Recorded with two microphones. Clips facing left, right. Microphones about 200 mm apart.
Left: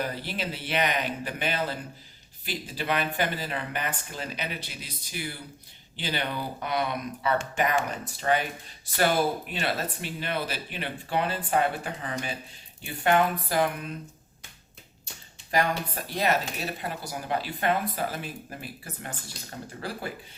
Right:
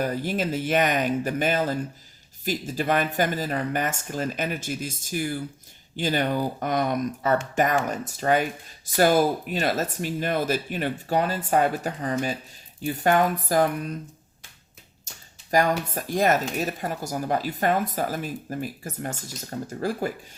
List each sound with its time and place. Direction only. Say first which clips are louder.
0.0 s speech: right 6 dB; 45° right (ahead or behind)
15.4 s speech: right 4 dB; 40° right (ahead or behind)